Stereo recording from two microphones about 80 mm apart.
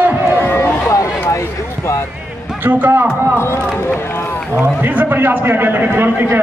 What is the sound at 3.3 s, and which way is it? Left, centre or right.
Speech, left.